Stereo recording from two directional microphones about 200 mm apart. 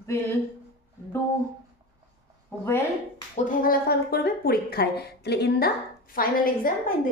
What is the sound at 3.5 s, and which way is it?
Speech, 45° left (ahead or behind).